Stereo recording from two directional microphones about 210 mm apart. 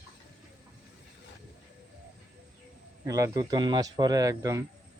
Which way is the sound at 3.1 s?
15° right (ahead or behind).